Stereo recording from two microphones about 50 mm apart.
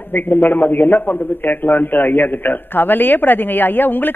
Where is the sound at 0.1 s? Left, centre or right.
Left.